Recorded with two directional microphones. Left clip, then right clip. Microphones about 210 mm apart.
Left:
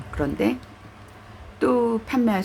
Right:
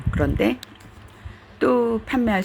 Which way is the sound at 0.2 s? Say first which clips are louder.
Right 2 dB; 15° right (ahead or behind).